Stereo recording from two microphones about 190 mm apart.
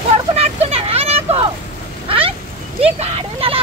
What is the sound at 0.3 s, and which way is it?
Vehicle, 35° right (ahead or behind).